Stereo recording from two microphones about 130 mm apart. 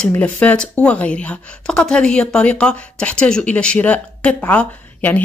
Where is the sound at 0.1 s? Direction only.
10° left (ahead or behind).